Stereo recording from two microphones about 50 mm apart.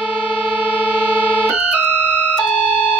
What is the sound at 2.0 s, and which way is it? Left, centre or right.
Siren, left.